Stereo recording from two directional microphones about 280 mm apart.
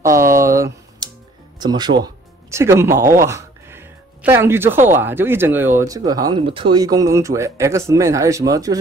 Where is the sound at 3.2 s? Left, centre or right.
Centre.